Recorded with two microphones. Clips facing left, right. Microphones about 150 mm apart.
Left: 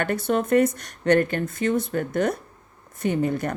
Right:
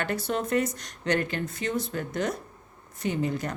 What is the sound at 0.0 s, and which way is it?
Speech, 55° left (ahead or behind).